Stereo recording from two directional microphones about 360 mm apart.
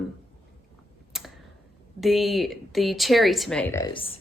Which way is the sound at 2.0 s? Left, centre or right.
Centre.